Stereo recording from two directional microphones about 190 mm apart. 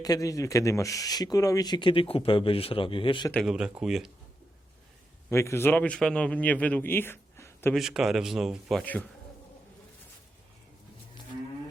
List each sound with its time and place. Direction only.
0.0 s speech: 20° left (ahead or behind)
3.3 s a man's voice: 5° right (ahead or behind)
5.3 s a man's voice: 15° left (ahead or behind)
7.7 s a man's voice: centre (ahead or behind)